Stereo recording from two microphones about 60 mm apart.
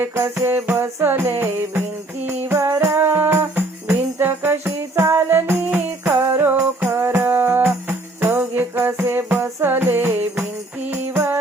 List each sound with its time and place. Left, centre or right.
0.3 s music: right